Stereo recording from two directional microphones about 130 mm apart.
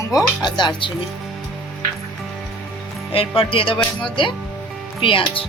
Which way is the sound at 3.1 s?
45° left (ahead or behind).